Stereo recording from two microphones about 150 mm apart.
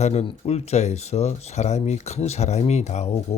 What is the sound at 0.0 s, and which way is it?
Speech, 45° left (ahead or behind).